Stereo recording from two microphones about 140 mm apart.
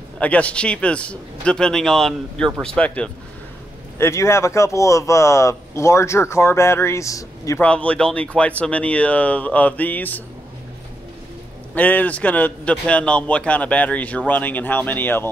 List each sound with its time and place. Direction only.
0.2 s a man's voice: 10° left (ahead or behind)
4.0 s speech: 20° left (ahead or behind)
7.6 s a man's voice: 10° left (ahead or behind)
11.7 s a man's voice: 10° left (ahead or behind)